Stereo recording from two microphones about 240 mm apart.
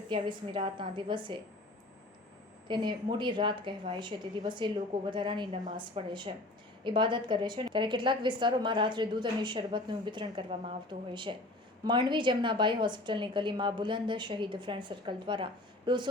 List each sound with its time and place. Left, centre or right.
0.1 s a woman's voice: centre
2.6 s a woman's voice: centre